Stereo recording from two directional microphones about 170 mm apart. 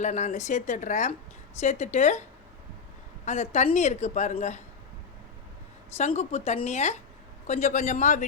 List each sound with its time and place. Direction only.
0.0 s a woman's voice: 45° left (ahead or behind)
3.2 s a woman's voice: 40° left (ahead or behind)
6.0 s a woman's voice: 40° left (ahead or behind)